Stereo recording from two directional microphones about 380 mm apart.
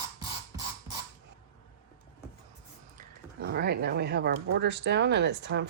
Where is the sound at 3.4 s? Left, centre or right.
Right.